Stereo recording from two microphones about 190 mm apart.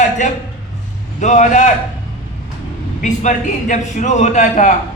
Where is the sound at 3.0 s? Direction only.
40° left (ahead or behind).